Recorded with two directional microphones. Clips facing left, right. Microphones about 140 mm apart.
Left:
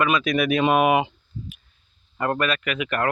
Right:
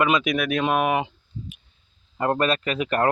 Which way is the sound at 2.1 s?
25° right (ahead or behind).